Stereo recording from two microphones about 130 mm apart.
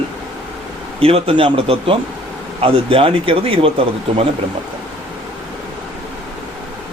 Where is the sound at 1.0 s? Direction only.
45° right (ahead or behind).